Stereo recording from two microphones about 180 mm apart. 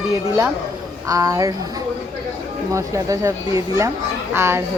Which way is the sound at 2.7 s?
15° right (ahead or behind).